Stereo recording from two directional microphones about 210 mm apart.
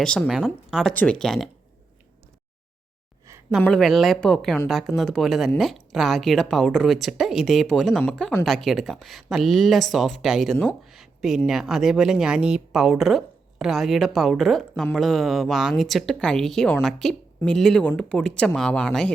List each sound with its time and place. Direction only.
0.0 s speech: centre (ahead or behind)
3.6 s speech: centre (ahead or behind)